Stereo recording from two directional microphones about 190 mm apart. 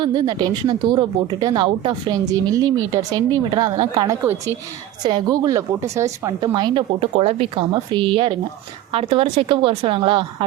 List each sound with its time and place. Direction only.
0.0 s speech: 20° right (ahead or behind)